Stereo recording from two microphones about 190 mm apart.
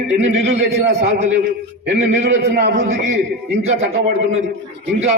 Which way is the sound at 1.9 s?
60° right (ahead or behind).